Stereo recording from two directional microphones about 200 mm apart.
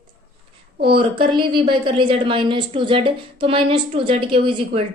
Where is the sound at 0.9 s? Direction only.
25° right (ahead or behind).